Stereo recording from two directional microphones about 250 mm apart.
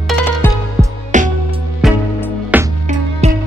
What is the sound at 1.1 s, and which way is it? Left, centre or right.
Music, right.